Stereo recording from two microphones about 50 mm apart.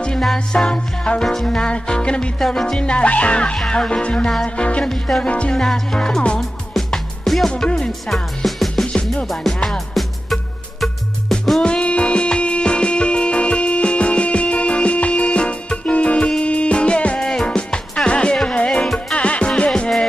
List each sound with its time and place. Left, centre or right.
0.5 s music: centre
2.5 s speech: centre
4.8 s music: centre
6.9 s music: centre
8.5 s music: centre
8.8 s music: centre
9.3 s music: centre
11.6 s music: left
17.2 s music: centre